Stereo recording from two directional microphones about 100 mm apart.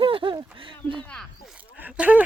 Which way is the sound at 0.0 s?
55° right (ahead or behind).